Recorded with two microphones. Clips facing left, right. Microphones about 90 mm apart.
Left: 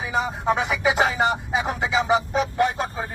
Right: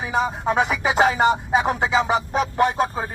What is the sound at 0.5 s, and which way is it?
Music, 45° right (ahead or behind).